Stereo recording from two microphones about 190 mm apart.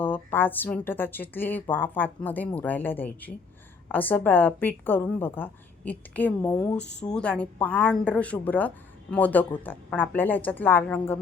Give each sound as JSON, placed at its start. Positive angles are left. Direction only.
{"t": 0.0, "sound": "speech", "side_deg": 10}
{"t": 6.7, "sound": "speech", "side_deg": 65}
{"t": 7.1, "sound": "speech", "side_deg": 5}